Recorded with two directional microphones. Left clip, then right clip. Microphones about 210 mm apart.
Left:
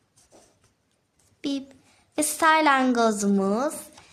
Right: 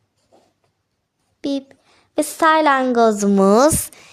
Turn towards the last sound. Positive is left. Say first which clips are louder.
# right 12 dB
turn(degrees=-50)  # may be behind; listen again after turning